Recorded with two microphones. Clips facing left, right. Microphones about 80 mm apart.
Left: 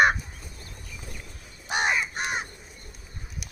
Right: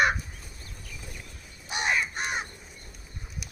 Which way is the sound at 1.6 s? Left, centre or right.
Left.